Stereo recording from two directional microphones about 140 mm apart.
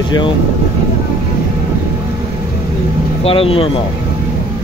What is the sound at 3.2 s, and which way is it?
Speech, 40° left (ahead or behind).